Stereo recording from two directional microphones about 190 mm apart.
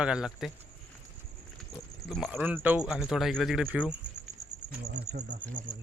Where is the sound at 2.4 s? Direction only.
10° right (ahead or behind).